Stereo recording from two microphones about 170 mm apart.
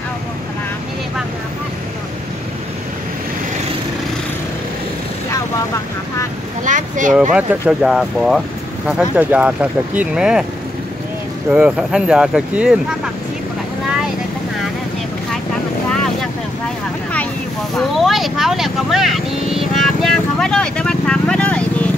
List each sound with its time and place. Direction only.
6.6 s speech: 45° right (ahead or behind)
7.3 s speech: 5° right (ahead or behind)
11.5 s speech: 5° right (ahead or behind)
17.7 s speech: centre (ahead or behind)